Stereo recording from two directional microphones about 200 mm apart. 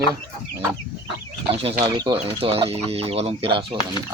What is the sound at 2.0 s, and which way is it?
Speech, 25° right (ahead or behind).